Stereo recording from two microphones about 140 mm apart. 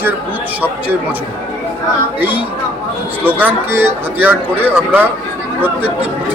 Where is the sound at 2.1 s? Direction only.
15° right (ahead or behind).